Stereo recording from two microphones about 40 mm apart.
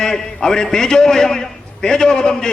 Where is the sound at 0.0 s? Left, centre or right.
Centre.